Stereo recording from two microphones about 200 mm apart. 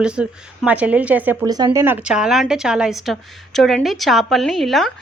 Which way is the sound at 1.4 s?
20° right (ahead or behind).